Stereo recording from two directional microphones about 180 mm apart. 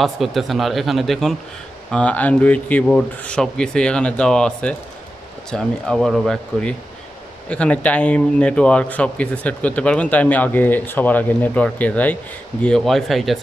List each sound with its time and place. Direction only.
0.0 s a man's voice: centre (ahead or behind)